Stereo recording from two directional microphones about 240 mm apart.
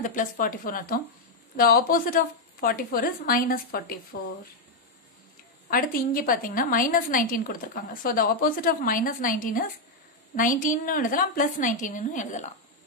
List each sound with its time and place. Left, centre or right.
0.0 s a woman's voice: left
5.7 s a woman's voice: left